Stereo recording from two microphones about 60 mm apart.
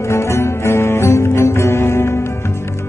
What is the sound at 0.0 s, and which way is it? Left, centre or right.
Music, left.